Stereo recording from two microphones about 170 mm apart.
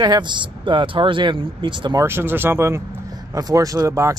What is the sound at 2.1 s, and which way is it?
Speech, 15° right (ahead or behind).